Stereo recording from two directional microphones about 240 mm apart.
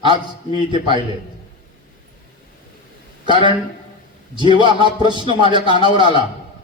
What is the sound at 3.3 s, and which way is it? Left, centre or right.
Speech, centre.